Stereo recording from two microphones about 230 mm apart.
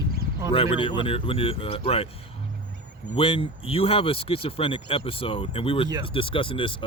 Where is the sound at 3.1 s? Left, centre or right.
Left.